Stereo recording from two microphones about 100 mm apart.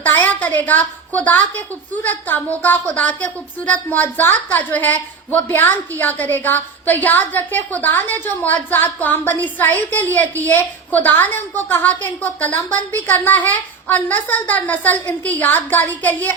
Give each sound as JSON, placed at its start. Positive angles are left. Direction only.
{"t": 0.0, "sound": "a woman's voice", "side_deg": 20}